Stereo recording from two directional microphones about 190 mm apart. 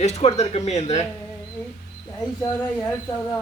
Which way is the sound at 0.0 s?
35° left (ahead or behind).